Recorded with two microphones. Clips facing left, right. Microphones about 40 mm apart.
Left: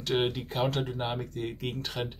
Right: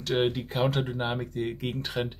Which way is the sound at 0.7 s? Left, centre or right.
Centre.